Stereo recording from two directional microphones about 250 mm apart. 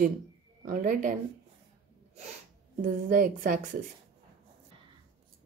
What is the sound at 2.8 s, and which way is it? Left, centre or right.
A woman's voice, right.